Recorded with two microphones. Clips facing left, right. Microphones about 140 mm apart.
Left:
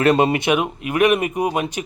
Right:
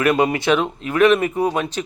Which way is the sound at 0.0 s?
30° left (ahead or behind).